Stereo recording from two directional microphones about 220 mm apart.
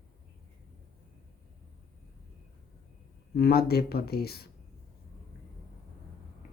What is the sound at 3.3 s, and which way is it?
Speech, 45° left (ahead or behind).